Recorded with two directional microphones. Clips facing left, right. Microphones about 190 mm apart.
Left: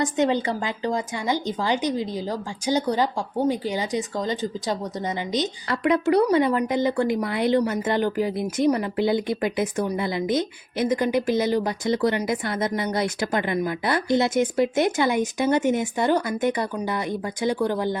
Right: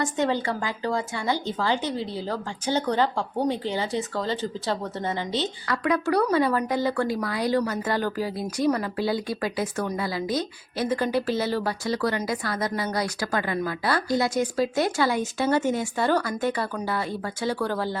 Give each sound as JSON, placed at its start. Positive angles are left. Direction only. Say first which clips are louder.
{"t": 0.0, "sound": "a woman's voice", "louder": "left 3 dB", "side_deg": 20}